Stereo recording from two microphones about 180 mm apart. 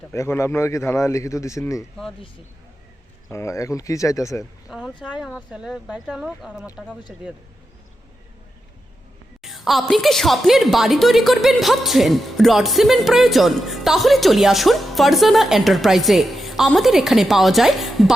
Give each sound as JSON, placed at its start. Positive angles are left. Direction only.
{"t": 0.1, "sound": "a man's voice", "side_deg": 15}
{"t": 3.2, "sound": "a man's voice", "side_deg": 15}
{"t": 4.7, "sound": "a woman's voice", "side_deg": -5}
{"t": 9.4, "sound": "a woman's voice", "side_deg": 0}